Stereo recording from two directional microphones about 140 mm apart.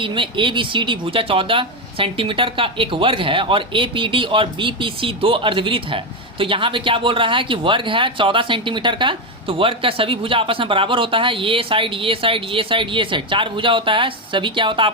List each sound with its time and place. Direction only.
0.0 s speech: 35° right (ahead or behind)